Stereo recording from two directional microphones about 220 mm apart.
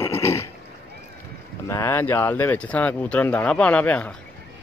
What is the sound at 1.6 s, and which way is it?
Speech, 10° left (ahead or behind).